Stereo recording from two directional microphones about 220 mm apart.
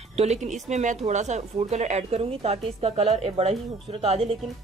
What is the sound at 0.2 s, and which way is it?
Speech, 30° right (ahead or behind).